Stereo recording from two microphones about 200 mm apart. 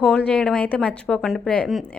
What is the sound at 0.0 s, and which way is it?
Speech, 5° left (ahead or behind).